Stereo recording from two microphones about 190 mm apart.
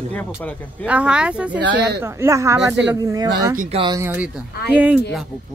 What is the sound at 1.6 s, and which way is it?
Speech, 70° right (ahead or behind).